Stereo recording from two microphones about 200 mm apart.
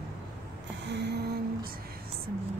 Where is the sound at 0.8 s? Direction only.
60° right (ahead or behind).